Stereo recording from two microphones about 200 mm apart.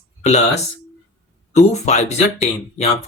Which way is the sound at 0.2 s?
35° left (ahead or behind).